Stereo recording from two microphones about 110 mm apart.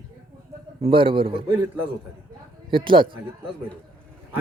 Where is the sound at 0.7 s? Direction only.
55° right (ahead or behind).